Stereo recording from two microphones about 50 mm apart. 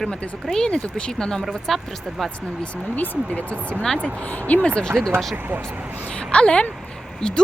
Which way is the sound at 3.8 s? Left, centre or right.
Centre.